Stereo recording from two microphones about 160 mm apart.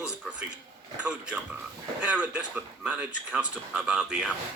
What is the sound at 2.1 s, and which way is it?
Speech, 10° right (ahead or behind).